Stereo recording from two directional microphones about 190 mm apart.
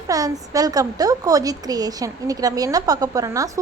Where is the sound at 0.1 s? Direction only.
20° right (ahead or behind).